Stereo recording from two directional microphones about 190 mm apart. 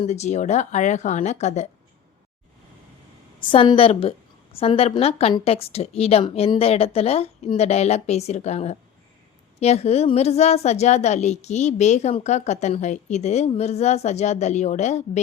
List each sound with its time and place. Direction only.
0.0 s a woman's voice: 35° left (ahead or behind)
3.5 s a woman's voice: 30° left (ahead or behind)